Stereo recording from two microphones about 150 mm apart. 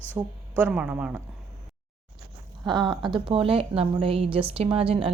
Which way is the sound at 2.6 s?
30° right (ahead or behind).